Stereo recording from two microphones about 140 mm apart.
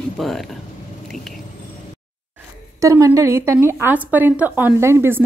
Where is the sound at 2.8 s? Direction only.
20° right (ahead or behind).